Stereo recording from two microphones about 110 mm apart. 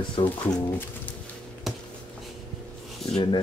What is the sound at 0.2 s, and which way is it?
Speech, 50° left (ahead or behind).